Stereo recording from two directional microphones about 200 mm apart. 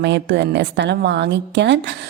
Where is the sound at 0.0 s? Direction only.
60° right (ahead or behind).